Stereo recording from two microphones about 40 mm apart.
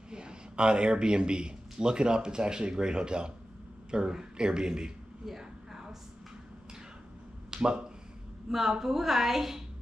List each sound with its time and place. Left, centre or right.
0.1 s a man's voice: right
5.4 s a sound: centre
7.5 s speech: right
8.5 s a woman's voice: centre